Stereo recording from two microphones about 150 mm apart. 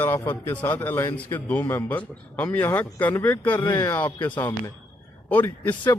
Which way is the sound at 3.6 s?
25° left (ahead or behind).